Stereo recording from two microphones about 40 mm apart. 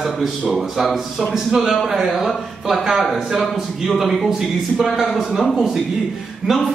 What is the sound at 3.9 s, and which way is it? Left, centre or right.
A man's voice, centre.